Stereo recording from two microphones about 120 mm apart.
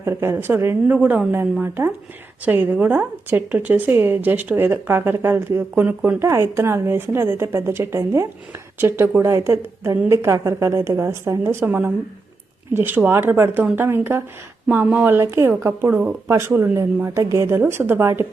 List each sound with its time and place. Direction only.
0.0 s a woman's voice: 20° right (ahead or behind)